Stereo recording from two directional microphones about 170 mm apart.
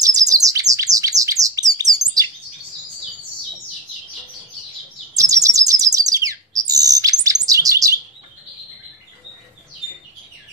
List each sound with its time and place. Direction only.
0.0 s bird: 20° right (ahead or behind)
5.1 s bird: 20° right (ahead or behind)